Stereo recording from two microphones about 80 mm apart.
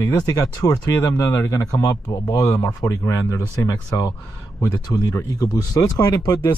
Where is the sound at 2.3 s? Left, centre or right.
Left.